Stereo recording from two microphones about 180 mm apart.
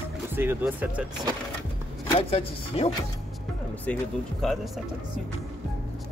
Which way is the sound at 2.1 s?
35° left (ahead or behind).